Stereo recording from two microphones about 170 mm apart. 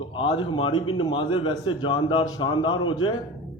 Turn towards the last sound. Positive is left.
turn(degrees=30)  # may be behind; listen again after turning